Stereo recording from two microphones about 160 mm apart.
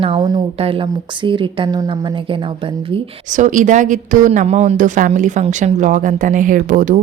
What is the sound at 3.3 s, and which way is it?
Speech, 50° right (ahead or behind).